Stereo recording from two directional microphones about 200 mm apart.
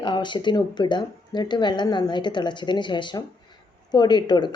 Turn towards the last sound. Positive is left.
turn(degrees=20)  # may be behind; listen again after turning